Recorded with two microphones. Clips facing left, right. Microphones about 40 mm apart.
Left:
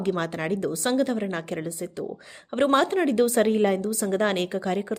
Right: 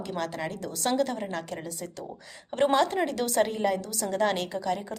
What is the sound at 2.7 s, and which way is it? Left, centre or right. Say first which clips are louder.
A woman's voice: left 4 dB; left.